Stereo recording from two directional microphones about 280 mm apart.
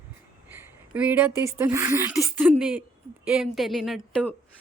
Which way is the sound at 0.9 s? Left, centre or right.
Centre.